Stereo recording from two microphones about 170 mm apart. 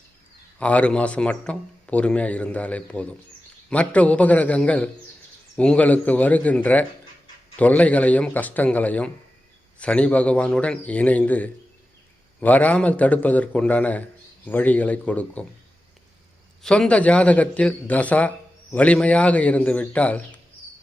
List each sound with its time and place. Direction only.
0.6 s a man's voice: 5° left (ahead or behind)
16.6 s a man's voice: 5° left (ahead or behind)